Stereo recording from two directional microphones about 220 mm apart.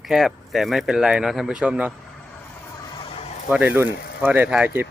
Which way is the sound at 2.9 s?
25° left (ahead or behind).